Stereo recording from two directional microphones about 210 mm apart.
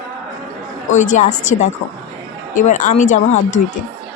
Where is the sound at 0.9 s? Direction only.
35° left (ahead or behind).